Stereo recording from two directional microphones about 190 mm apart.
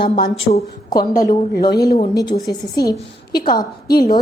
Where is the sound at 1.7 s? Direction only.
55° left (ahead or behind).